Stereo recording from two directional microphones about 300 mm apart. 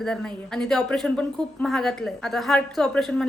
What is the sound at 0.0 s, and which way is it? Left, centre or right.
A woman's voice, centre.